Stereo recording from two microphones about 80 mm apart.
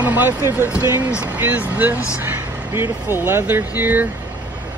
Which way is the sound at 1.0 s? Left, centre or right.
Centre.